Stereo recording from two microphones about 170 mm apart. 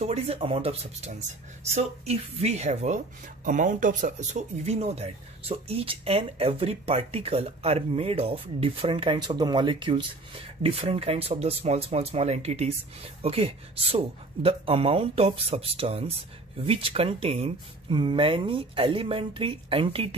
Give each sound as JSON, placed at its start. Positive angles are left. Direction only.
{"t": 0.0, "sound": "speech", "side_deg": -35}